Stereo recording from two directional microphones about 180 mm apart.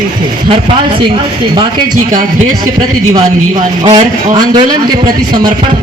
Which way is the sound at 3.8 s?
25° right (ahead or behind).